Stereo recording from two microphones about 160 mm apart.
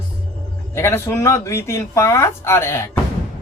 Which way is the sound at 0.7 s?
15° left (ahead or behind).